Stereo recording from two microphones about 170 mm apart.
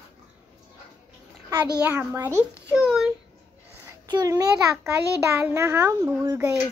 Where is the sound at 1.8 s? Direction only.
10° right (ahead or behind).